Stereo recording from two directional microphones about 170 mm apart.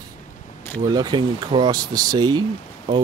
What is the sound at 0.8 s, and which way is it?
Speech, 25° right (ahead or behind).